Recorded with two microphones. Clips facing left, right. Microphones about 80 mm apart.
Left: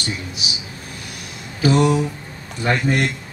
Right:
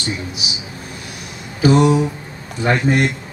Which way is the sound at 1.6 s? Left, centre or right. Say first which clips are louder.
Right 3 dB; centre.